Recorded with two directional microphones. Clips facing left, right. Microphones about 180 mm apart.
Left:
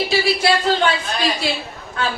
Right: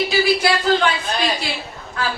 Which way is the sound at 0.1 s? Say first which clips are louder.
Even; 30° left (ahead or behind).